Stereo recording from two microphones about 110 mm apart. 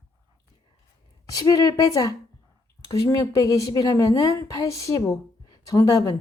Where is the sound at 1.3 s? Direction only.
35° left (ahead or behind).